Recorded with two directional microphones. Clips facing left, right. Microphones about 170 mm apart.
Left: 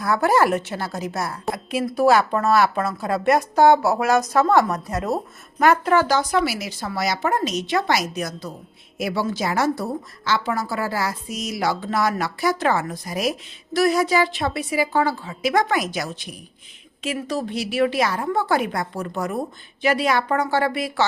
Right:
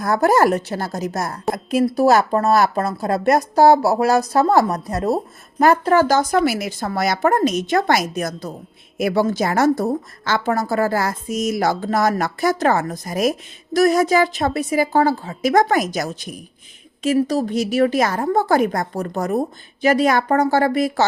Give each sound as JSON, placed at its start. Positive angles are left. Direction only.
{"t": 0.0, "sound": "a woman's voice", "side_deg": -45}